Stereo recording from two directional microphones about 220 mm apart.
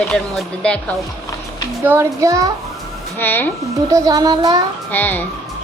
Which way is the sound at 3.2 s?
10° left (ahead or behind).